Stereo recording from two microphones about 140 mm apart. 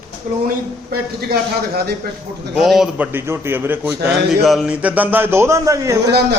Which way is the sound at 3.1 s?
15° right (ahead or behind).